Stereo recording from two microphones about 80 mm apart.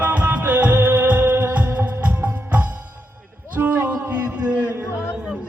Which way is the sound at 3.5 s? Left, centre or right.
Right.